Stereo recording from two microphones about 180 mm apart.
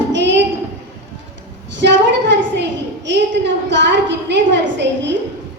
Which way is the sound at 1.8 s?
80° right.